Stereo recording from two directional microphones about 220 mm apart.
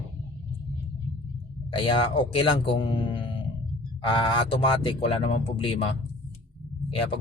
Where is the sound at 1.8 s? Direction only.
25° left (ahead or behind).